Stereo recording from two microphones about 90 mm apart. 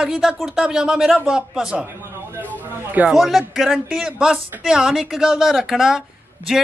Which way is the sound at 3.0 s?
5° right (ahead or behind).